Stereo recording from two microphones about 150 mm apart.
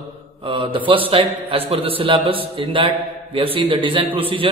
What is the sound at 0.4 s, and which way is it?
A man's voice, 35° right (ahead or behind).